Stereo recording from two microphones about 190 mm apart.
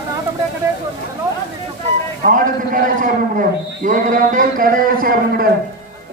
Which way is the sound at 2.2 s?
45° right (ahead or behind).